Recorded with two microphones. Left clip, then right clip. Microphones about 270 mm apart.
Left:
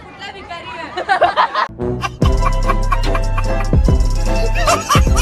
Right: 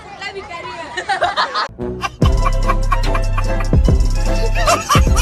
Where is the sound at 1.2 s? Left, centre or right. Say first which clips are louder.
Left 4 dB; left.